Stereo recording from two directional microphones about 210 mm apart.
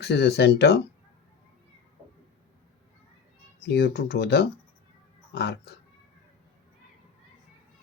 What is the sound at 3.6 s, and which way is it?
Speech, 50° left (ahead or behind).